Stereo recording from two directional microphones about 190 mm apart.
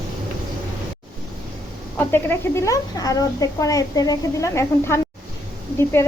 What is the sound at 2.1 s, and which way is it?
Speech, 10° left (ahead or behind).